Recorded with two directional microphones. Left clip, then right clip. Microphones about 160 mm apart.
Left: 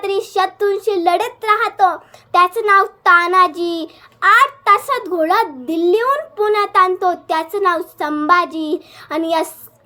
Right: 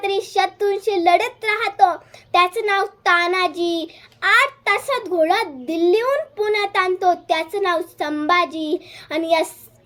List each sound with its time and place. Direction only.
0.0 s a child's voice: 15° right (ahead or behind)